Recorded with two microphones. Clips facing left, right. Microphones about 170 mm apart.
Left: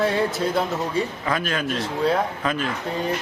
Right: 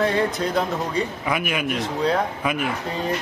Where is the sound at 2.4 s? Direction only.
10° right (ahead or behind).